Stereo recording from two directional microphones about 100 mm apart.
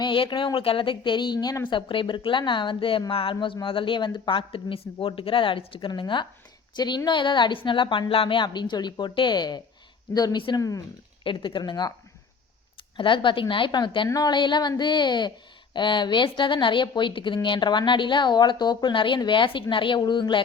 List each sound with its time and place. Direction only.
0.0 s speech: 50° left (ahead or behind)
10.6 s speech: 35° left (ahead or behind)
11.2 s speech: 55° left (ahead or behind)
13.0 s speech: 55° left (ahead or behind)